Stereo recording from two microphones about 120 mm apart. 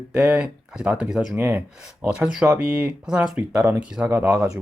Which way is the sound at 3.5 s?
20° right (ahead or behind).